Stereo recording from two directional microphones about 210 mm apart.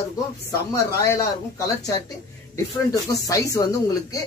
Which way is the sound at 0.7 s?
15° left (ahead or behind).